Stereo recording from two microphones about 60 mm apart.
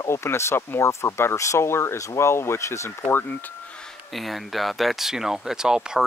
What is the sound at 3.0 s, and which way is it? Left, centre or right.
Speech, left.